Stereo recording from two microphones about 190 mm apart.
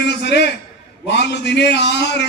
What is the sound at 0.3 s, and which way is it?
A man's voice, 60° left (ahead or behind).